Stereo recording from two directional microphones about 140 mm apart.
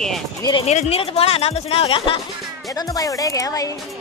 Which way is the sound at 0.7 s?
50° left (ahead or behind).